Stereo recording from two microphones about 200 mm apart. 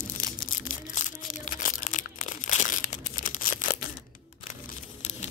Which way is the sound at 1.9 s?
40° left (ahead or behind).